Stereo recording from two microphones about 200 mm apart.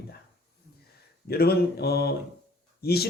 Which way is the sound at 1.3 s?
50° left (ahead or behind).